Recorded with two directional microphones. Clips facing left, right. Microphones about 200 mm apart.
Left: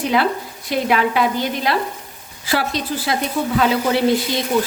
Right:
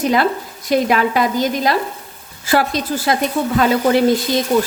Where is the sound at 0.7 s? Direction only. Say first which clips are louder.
Right 3 dB; 45° right (ahead or behind).